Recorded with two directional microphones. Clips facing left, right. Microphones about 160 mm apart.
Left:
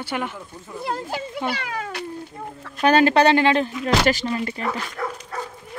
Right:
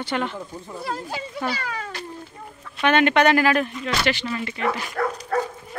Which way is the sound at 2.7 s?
35° left (ahead or behind).